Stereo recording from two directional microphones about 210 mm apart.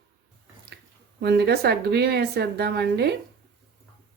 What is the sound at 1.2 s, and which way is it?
A woman's voice, 50° right (ahead or behind).